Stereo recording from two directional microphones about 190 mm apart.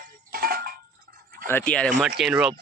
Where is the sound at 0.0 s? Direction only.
50° right (ahead or behind).